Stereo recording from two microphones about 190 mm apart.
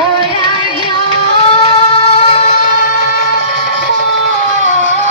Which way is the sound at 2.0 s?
30° left (ahead or behind).